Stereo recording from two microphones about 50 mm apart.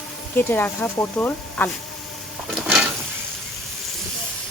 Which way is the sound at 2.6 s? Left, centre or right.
Centre.